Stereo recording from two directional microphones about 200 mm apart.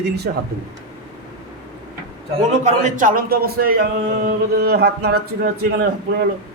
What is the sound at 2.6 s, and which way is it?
Speech, 40° right (ahead or behind).